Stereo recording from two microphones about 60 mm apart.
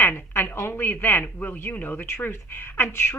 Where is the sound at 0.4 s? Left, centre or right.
Left.